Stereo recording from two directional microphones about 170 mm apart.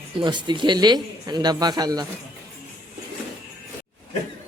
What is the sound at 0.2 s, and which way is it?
Speech, 25° right (ahead or behind).